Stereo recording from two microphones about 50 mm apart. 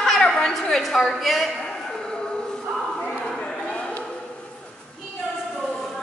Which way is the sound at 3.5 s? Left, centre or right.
Centre.